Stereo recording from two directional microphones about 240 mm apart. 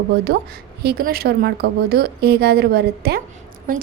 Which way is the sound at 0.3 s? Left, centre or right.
Right.